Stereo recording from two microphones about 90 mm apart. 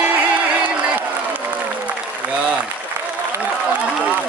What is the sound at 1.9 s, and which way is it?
Applause, 15° right (ahead or behind).